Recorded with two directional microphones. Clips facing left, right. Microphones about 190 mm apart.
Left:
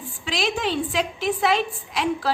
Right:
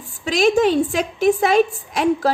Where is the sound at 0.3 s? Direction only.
45° right (ahead or behind).